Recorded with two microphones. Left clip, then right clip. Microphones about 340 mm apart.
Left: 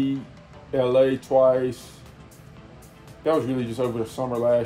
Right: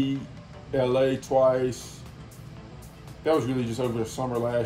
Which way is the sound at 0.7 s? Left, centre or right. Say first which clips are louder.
Left 4 dB; centre.